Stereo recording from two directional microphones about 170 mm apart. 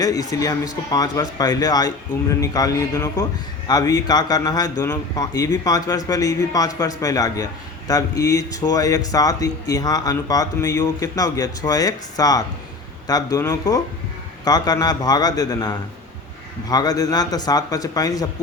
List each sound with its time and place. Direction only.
0.0 s speech: 20° left (ahead or behind)